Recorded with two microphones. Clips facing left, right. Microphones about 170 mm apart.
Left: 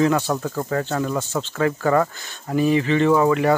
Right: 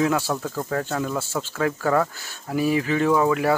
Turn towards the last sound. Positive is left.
turn(degrees=0)  # may be behind; listen again after turning